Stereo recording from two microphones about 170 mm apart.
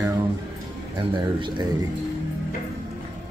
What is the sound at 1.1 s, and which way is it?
Speech, 30° right (ahead or behind).